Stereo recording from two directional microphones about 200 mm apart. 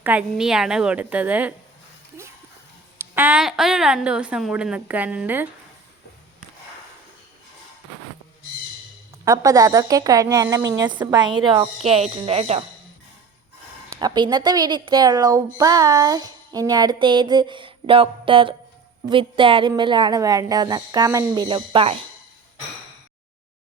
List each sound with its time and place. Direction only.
0.0 s speech: 5° right (ahead or behind)
3.0 s a woman's voice: 10° right (ahead or behind)
9.2 s a woman's voice: 15° right (ahead or behind)
13.9 s a woman's voice: 20° right (ahead or behind)